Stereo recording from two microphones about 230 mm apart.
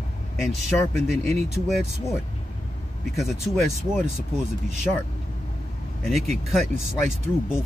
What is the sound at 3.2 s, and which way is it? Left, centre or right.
Speech, centre.